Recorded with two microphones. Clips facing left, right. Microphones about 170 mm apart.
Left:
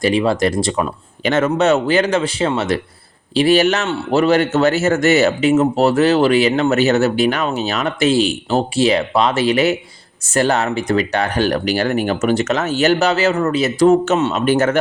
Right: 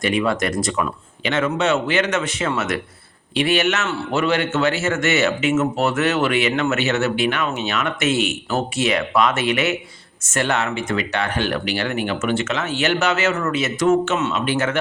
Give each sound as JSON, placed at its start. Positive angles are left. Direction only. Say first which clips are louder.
{"t": 0.0, "sound": "speech", "louder": "left 5 dB", "side_deg": 30}
{"t": 1.2, "sound": "speech", "louder": "left 5 dB", "side_deg": 40}